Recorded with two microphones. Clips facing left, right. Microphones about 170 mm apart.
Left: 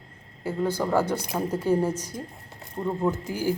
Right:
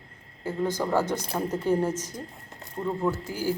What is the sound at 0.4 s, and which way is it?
A woman's voice, 10° left (ahead or behind).